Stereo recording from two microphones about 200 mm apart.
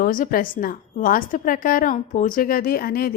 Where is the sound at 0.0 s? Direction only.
45° left (ahead or behind).